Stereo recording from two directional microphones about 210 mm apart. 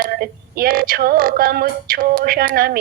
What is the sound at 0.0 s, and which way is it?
Music, 45° right (ahead or behind).